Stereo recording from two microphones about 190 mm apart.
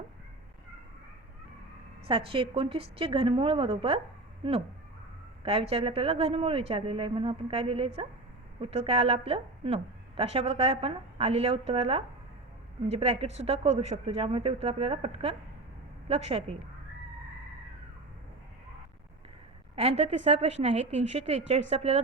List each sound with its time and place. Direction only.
2.0 s a woman's voice: 25° right (ahead or behind)
5.4 s a woman's voice: 30° right (ahead or behind)
19.7 s a woman's voice: 35° right (ahead or behind)